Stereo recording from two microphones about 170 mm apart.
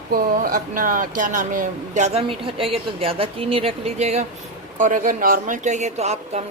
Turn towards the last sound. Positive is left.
turn(degrees=-40)  # may be behind; listen again after turning